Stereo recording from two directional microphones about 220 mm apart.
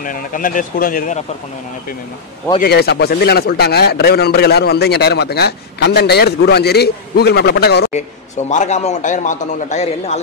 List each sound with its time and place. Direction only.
0.0 s a man's voice: 40° left (ahead or behind)
2.6 s speech: 45° left (ahead or behind)
8.5 s a man's voice: 35° left (ahead or behind)